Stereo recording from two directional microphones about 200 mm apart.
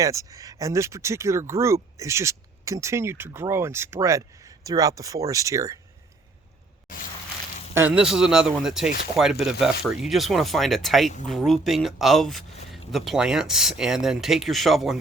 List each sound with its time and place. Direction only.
0.0 s speech: 15° right (ahead or behind)
7.7 s speech: 10° right (ahead or behind)